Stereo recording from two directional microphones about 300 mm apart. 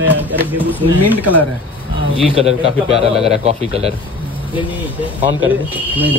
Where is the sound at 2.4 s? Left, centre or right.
Centre.